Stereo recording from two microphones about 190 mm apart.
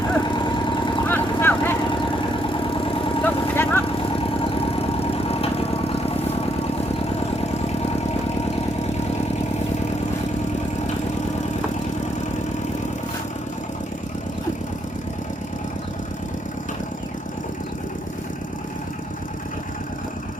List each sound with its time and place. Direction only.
0.3 s vehicle: 25° left (ahead or behind)
1.0 s vehicle: 10° left (ahead or behind)
1.9 s vehicle: 25° left (ahead or behind)
3.2 s vehicle: 10° left (ahead or behind)
3.9 s vehicle: 30° left (ahead or behind)